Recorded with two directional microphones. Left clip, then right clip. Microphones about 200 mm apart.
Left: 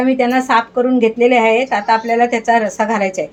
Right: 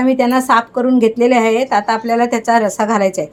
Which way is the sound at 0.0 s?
40° right (ahead or behind).